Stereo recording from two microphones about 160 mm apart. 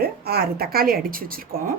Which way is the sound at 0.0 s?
75° right (ahead or behind).